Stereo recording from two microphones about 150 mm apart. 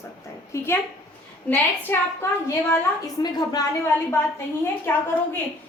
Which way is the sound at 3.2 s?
25° left (ahead or behind).